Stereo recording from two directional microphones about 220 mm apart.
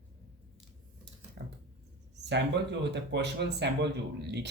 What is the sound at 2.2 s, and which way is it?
Speech, 50° right (ahead or behind).